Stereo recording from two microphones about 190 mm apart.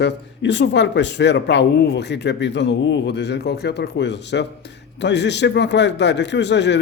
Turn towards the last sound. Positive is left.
turn(degrees=65)  # may be behind; listen again after turning